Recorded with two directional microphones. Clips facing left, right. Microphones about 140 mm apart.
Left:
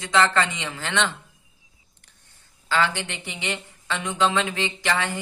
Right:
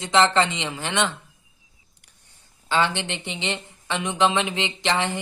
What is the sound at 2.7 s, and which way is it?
Speech, 20° right (ahead or behind).